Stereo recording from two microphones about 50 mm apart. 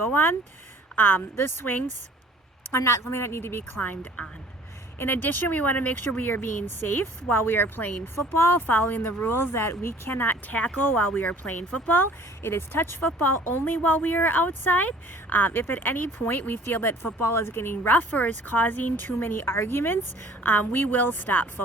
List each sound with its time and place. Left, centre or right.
0.0 s speech: left
2.7 s speech: left
3.8 s speech: left
4.9 s speech: left
9.3 s speech: left
12.4 s speech: left
17.2 s speech: left